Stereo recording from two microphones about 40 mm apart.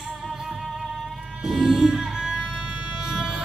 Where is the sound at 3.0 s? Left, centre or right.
Centre.